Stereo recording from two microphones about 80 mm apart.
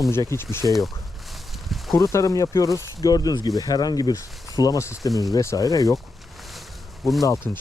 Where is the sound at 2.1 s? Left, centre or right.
Left.